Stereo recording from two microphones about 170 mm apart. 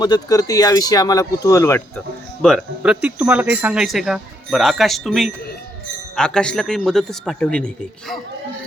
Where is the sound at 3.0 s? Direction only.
10° right (ahead or behind).